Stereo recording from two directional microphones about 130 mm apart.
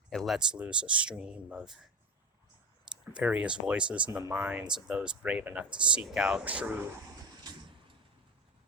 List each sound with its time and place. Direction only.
0.1 s speech: centre (ahead or behind)
3.1 s speech: 10° right (ahead or behind)
4.1 s speech: 20° right (ahead or behind)